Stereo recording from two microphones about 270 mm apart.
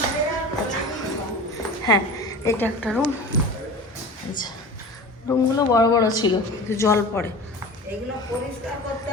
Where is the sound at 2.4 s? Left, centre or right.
Centre.